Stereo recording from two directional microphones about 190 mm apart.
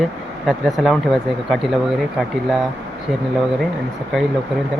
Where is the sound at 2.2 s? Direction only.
Centre (ahead or behind).